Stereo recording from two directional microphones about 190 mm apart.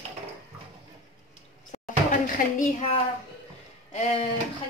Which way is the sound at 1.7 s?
40° left (ahead or behind).